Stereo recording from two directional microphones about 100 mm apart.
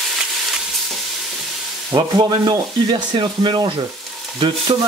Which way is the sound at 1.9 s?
45° right (ahead or behind).